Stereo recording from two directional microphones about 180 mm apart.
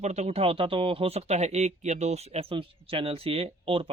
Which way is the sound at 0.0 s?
35° right (ahead or behind).